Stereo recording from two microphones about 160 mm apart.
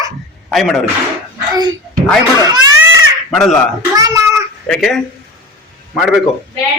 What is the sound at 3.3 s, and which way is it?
Speech, centre (ahead or behind).